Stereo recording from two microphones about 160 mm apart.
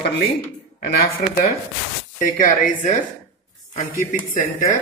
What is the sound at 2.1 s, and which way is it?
Speech, 50° left (ahead or behind).